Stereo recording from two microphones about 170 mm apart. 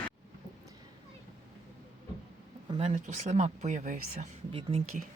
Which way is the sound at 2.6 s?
35° right (ahead or behind).